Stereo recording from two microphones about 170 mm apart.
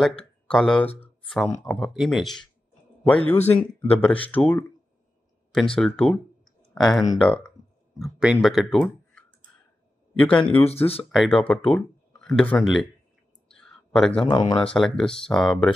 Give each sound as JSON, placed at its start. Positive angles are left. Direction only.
{"t": 0.5, "sound": "a man's voice", "side_deg": 5}
{"t": 5.8, "sound": "speech", "side_deg": 5}
{"t": 10.2, "sound": "speech", "side_deg": 5}
{"t": 10.6, "sound": "speech", "side_deg": 35}
{"t": 11.1, "sound": "speech", "side_deg": 0}
{"t": 13.5, "sound": "a sound", "side_deg": 5}
{"t": 14.2, "sound": "speech", "side_deg": 25}
{"t": 14.6, "sound": "speech", "side_deg": 5}